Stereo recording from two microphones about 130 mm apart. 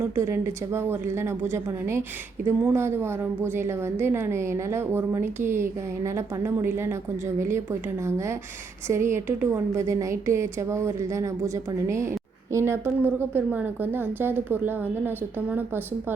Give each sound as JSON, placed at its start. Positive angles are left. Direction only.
{"t": 0.0, "sound": "a woman's voice", "side_deg": -20}